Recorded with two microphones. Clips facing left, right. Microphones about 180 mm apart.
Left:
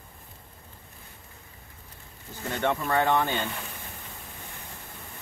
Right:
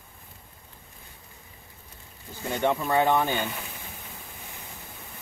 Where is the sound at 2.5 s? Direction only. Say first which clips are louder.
Right 2 dB; 10° right (ahead or behind).